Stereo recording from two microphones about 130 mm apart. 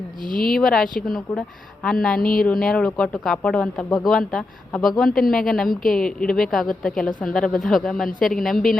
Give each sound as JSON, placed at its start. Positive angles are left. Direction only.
{"t": 0.4, "sound": "a woman's voice", "side_deg": 0}
{"t": 2.1, "sound": "speech", "side_deg": 90}
{"t": 2.5, "sound": "a woman's voice", "side_deg": 5}